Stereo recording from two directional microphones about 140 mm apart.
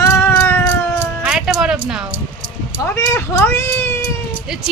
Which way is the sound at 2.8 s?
20° left (ahead or behind).